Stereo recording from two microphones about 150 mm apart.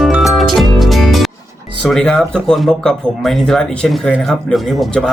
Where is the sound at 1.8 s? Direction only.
5° left (ahead or behind).